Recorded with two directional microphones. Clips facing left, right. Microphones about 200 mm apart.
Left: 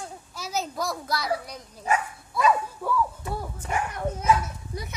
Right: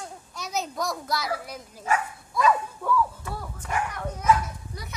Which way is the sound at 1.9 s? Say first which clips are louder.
Left 1 dB; 20° left (ahead or behind).